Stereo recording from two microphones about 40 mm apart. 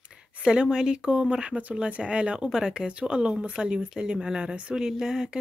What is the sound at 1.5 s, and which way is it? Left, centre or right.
Speech, right.